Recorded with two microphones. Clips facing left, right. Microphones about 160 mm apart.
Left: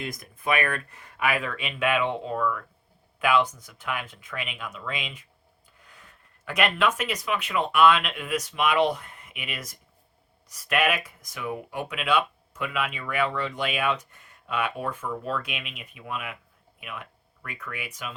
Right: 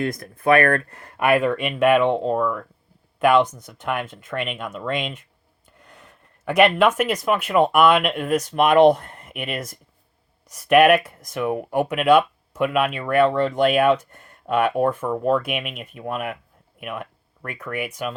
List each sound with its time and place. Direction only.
0.3 s speech: 65° right (ahead or behind)